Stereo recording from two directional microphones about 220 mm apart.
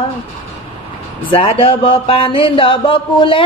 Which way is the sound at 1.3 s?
25° left (ahead or behind).